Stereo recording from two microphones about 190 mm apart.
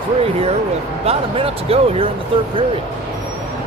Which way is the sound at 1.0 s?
30° right (ahead or behind).